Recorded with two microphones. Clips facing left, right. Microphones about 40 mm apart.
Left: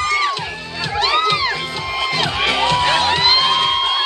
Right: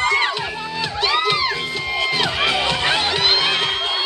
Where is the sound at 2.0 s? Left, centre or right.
Centre.